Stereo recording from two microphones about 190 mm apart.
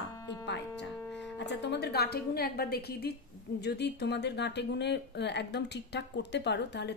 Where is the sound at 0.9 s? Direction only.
5° left (ahead or behind).